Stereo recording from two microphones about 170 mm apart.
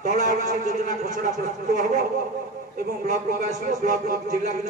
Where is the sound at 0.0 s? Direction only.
50° right (ahead or behind).